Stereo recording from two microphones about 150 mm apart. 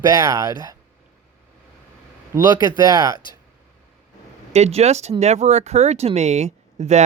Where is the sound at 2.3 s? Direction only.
25° right (ahead or behind).